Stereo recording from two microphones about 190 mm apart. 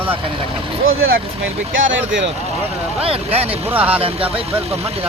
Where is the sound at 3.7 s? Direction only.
10° right (ahead or behind).